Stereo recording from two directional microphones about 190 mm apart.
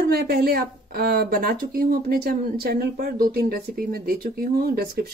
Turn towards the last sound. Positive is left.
turn(degrees=-55)  # may be behind; listen again after turning